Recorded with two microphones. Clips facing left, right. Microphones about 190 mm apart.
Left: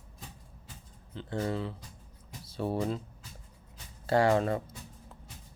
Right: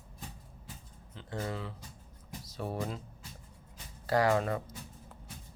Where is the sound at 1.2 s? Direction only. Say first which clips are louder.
Left 5 dB; 30° left (ahead or behind).